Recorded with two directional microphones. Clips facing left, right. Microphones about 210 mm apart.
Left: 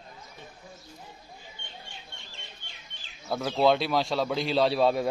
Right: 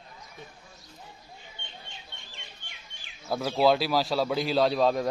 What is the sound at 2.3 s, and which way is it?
Bird, 15° right (ahead or behind).